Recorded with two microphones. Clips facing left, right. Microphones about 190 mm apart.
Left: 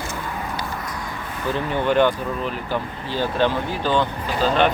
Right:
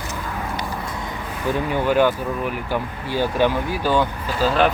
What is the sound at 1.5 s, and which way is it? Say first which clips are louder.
Speech: right 1 dB; 10° right (ahead or behind).